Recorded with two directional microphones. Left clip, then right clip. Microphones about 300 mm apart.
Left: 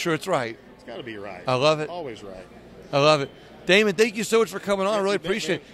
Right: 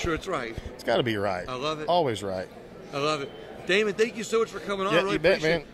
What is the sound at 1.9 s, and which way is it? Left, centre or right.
Speech, right.